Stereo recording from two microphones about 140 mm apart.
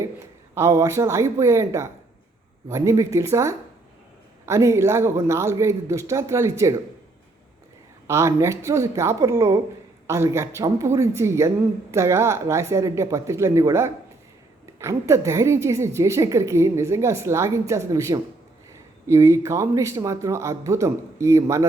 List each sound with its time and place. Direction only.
0.5 s speech: 20° right (ahead or behind)
8.0 s speech: 20° right (ahead or behind)